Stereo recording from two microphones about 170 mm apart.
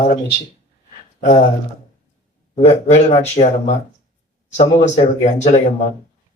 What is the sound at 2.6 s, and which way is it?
Speech, 40° left (ahead or behind).